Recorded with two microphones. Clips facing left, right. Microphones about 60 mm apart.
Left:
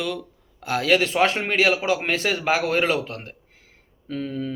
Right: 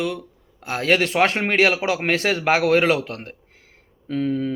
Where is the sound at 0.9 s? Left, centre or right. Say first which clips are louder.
Right 1 dB; right.